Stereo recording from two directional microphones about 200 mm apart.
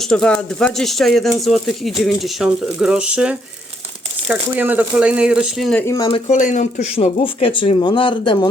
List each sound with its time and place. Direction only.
0.1 s speech: 5° left (ahead or behind)
5.8 s speech: 15° left (ahead or behind)
6.1 s speech: 30° left (ahead or behind)